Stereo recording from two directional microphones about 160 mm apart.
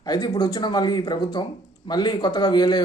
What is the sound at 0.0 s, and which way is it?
A man's voice, 25° left (ahead or behind).